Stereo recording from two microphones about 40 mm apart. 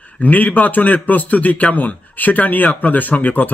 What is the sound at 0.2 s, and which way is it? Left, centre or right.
Speech, left.